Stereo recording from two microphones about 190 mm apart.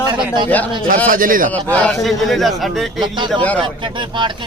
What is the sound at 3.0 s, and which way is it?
Speech, 25° right (ahead or behind).